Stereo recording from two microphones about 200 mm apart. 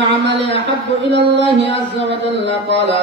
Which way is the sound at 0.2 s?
60° right (ahead or behind).